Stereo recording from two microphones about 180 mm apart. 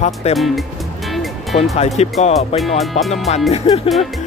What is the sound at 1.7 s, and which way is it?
Speech, 35° left (ahead or behind).